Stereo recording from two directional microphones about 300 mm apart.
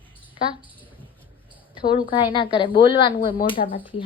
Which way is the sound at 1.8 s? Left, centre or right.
Centre.